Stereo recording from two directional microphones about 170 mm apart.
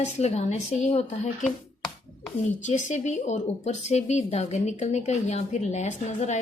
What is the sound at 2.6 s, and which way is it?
A woman's voice, 45° left (ahead or behind).